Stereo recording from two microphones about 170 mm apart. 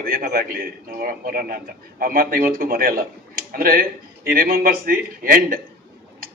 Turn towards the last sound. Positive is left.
turn(degrees=-55)  # may be behind; listen again after turning